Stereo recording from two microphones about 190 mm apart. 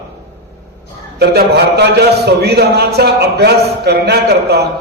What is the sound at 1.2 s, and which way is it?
A man's voice, 55° right (ahead or behind).